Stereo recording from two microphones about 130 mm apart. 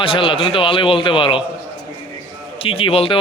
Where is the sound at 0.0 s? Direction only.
40° left (ahead or behind).